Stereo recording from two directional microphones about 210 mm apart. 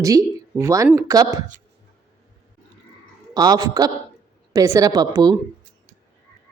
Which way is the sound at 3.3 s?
20° right (ahead or behind).